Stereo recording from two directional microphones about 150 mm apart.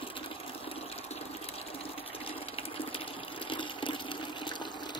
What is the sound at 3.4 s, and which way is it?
Water, 35° left (ahead or behind).